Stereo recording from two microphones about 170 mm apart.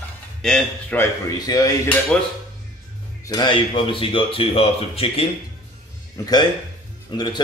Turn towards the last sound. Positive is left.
turn(degrees=25)  # may be behind; listen again after turning